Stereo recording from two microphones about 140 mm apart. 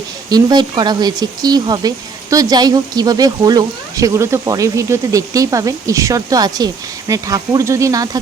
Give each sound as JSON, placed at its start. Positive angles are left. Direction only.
{"t": 0.3, "sound": "a woman's voice", "side_deg": -30}